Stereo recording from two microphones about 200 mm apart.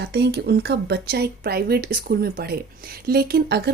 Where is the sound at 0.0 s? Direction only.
55° right (ahead or behind).